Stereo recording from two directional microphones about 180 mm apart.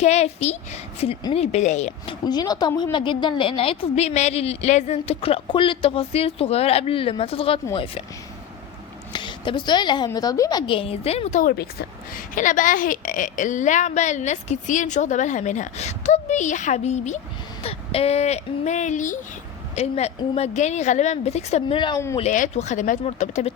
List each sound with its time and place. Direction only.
0.0 s a woman's voice: 40° left (ahead or behind)
2.2 s a woman's voice: 20° left (ahead or behind)
9.1 s a woman's voice: 25° left (ahead or behind)
10.7 s a woman's voice: 30° left (ahead or behind)
11.5 s a woman's voice: 55° left (ahead or behind); by 22.0 s 25° left (ahead or behind)
22.2 s a woman's voice: 40° left (ahead or behind)